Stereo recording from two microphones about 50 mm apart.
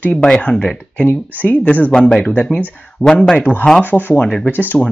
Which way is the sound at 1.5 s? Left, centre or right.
Left.